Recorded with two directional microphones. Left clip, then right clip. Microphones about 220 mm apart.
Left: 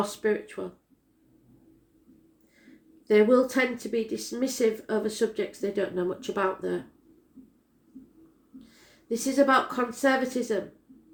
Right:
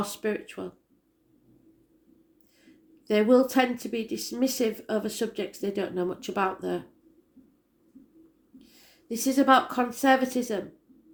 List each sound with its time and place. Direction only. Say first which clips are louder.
0.0 s speech: left 3 dB; 35° right (ahead or behind)
3.1 s speech: left 1 dB; 35° right (ahead or behind)
8.5 s speech: left 3 dB; 35° right (ahead or behind)